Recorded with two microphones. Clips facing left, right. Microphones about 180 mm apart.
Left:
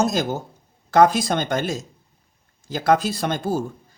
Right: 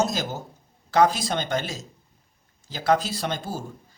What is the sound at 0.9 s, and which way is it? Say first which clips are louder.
Speech: left 4 dB; 50° left (ahead or behind).